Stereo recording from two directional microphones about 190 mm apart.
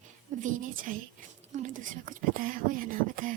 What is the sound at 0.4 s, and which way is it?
A woman's voice, 45° right (ahead or behind).